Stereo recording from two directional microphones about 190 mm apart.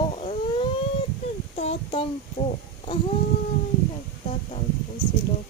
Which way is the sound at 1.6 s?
30° left (ahead or behind).